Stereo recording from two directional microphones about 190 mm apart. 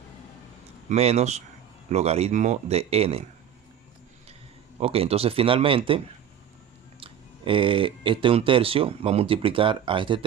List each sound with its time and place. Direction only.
0.9 s speech: 35° right (ahead or behind)
4.8 s speech: 30° right (ahead or behind)
7.0 s speech: 30° right (ahead or behind)